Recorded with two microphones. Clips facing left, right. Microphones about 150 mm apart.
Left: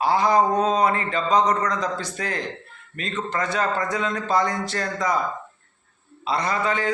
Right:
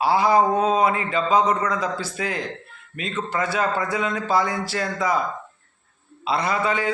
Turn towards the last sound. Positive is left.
turn(degrees=-10)  # may be behind; listen again after turning